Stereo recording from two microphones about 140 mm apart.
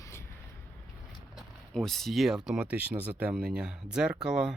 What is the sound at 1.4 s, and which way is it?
Speech, 5° left (ahead or behind).